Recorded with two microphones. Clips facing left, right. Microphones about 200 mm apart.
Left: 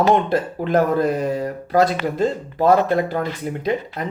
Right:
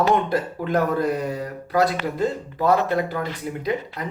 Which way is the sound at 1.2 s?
45° left (ahead or behind).